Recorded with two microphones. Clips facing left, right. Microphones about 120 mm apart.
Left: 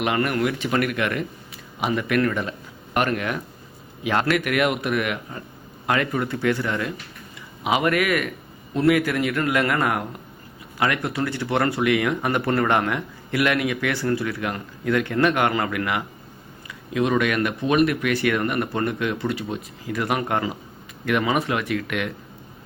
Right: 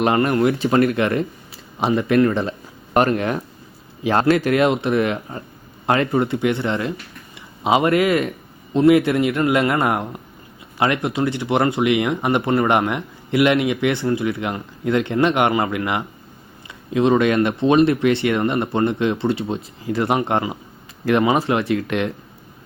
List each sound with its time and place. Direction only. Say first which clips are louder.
0.0 s speech: right 5 dB; 30° right (ahead or behind)